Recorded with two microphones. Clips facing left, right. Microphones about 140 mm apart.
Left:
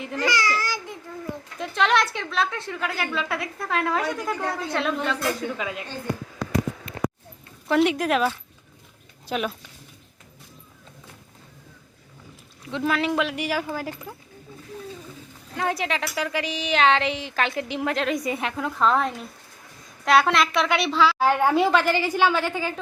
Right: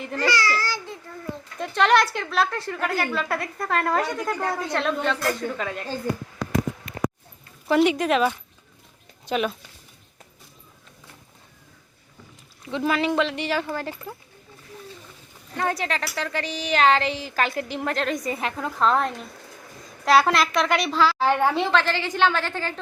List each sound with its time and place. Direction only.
0.0 s a woman's voice: centre (ahead or behind)
0.3 s speech: 15° left (ahead or behind)
1.5 s a woman's voice: centre (ahead or behind)
6.9 s a sound: 30° left (ahead or behind)
7.7 s a woman's voice: centre (ahead or behind)
12.6 s a woman's voice: centre (ahead or behind)
15.5 s a woman's voice: centre (ahead or behind)